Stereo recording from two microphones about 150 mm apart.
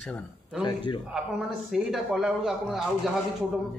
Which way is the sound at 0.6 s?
30° left (ahead or behind).